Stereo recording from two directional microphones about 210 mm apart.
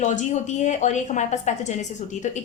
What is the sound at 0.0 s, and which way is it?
A woman's voice, 35° left (ahead or behind).